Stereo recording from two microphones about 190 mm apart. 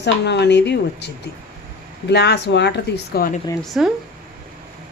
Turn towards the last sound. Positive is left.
turn(degrees=0)  # may be behind; listen again after turning